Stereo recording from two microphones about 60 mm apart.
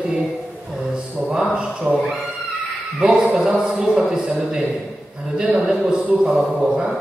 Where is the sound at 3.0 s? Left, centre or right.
Centre.